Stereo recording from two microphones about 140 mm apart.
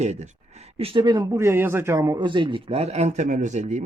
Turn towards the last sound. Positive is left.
turn(degrees=-60)  # may be behind; listen again after turning